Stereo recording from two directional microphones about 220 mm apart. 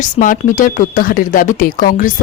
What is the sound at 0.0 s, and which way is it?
Speech, 35° left (ahead or behind).